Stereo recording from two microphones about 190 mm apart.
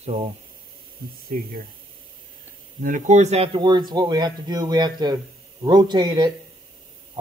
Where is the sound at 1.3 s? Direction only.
50° right (ahead or behind).